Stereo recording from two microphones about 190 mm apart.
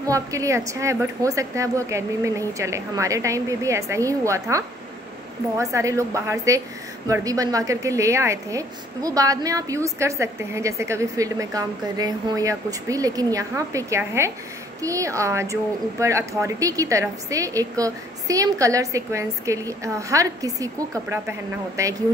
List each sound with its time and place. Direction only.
0.0 s a woman's voice: 15° right (ahead or behind)